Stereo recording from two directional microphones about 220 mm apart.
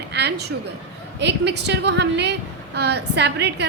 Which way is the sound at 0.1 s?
50° right (ahead or behind).